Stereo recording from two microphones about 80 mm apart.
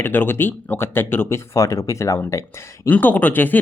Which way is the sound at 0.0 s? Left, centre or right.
Left.